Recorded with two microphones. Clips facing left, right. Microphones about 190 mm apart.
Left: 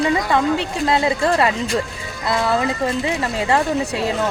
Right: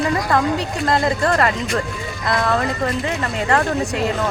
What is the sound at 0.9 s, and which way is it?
A man's voice, 5° left (ahead or behind).